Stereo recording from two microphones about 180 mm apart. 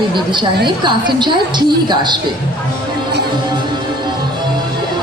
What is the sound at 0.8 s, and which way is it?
A woman's voice, 25° right (ahead or behind).